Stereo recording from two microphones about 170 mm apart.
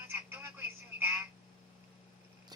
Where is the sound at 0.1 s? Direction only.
10° right (ahead or behind).